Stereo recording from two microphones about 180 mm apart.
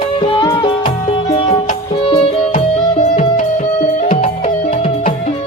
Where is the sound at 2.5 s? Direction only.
40° left (ahead or behind).